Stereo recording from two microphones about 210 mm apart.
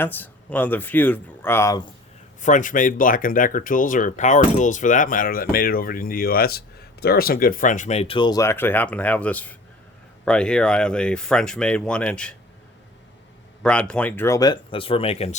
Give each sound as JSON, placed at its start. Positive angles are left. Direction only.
{"t": 0.0, "sound": "speech", "side_deg": 10}
{"t": 2.4, "sound": "speech", "side_deg": 35}
{"t": 13.6, "sound": "speech", "side_deg": 5}